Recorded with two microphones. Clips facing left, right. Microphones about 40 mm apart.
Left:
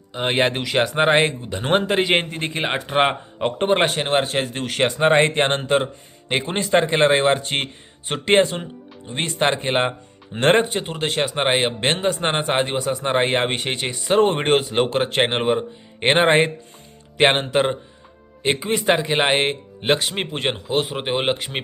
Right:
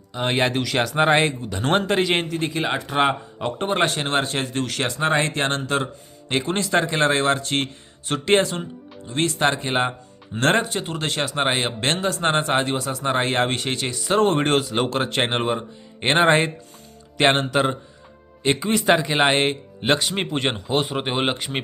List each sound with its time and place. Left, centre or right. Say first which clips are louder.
0.1 s speech: left 1 dB; left
3.7 s a man's voice: left 2 dB; centre
4.7 s speech: left 6 dB; left
10.8 s a man's voice: left 2 dB; centre